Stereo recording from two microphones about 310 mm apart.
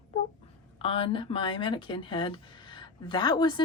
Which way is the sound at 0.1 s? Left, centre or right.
Left.